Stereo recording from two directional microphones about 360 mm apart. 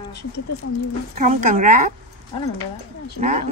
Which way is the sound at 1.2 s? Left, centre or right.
Right.